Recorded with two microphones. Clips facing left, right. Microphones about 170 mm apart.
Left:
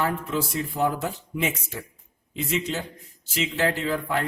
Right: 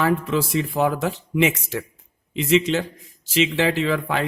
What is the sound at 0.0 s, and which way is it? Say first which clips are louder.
A man's voice: right 5 dB; 90° right.